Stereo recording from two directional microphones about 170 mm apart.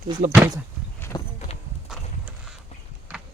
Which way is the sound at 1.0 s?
20° left (ahead or behind).